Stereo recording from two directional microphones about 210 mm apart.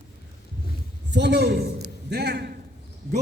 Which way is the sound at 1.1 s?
55° right (ahead or behind).